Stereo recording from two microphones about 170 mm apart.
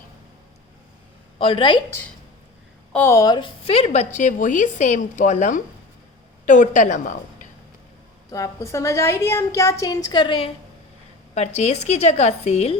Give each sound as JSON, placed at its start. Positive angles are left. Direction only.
{"t": 1.4, "sound": "a woman's voice", "side_deg": 30}
{"t": 2.9, "sound": "a woman's voice", "side_deg": 15}
{"t": 8.3, "sound": "a woman's voice", "side_deg": 20}
{"t": 11.3, "sound": "a woman's voice", "side_deg": 40}